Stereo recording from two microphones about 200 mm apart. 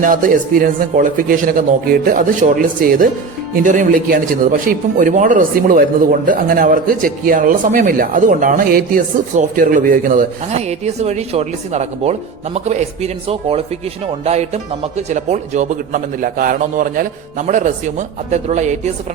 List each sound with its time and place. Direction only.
0.0 s speech: 40° right (ahead or behind)